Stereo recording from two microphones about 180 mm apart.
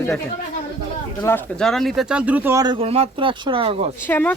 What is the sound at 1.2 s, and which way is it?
Speech, 10° left (ahead or behind).